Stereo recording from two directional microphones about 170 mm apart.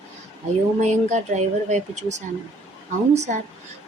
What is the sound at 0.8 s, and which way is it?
Speech, 45° right (ahead or behind).